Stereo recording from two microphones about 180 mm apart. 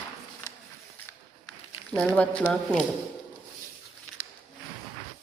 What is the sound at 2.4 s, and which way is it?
Speech, centre (ahead or behind).